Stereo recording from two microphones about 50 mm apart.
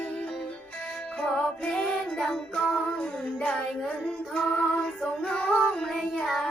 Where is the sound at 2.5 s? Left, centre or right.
Left.